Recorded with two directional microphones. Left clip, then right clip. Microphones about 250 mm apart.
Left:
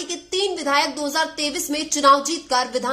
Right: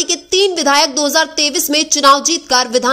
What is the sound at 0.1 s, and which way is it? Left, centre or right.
A woman's voice, right.